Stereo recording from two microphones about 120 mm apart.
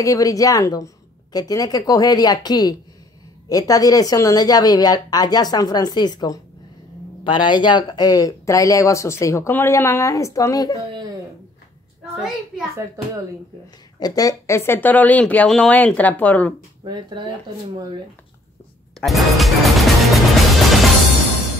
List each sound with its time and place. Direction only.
0.0 s a woman's voice: 30° left (ahead or behind)
12.7 s speech: 25° right (ahead or behind)
13.9 s speech: 30° left (ahead or behind); by 16.5 s 10° left (ahead or behind)
16.8 s speech: 35° right (ahead or behind)
18.9 s music: centre (ahead or behind)